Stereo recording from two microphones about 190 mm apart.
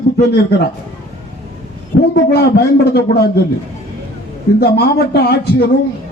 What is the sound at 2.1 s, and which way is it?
A man's voice, 60° left (ahead or behind).